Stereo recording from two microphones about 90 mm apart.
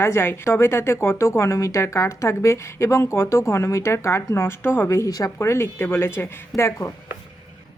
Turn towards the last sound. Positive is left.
turn(degrees=35)  # may be behind; listen again after turning